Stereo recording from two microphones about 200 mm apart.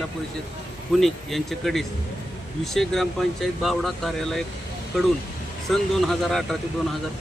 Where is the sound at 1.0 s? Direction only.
Centre (ahead or behind).